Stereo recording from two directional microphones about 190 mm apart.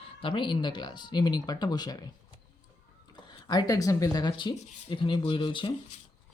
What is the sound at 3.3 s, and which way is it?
Speech, 20° left (ahead or behind).